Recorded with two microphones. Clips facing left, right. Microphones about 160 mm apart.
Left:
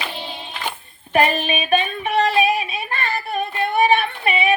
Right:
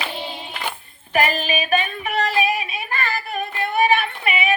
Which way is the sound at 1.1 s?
30° left (ahead or behind).